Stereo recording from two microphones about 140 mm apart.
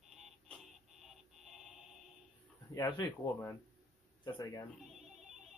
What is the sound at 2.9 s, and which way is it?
Speech, 30° left (ahead or behind).